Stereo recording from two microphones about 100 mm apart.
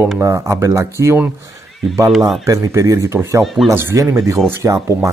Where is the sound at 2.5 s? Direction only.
35° right (ahead or behind).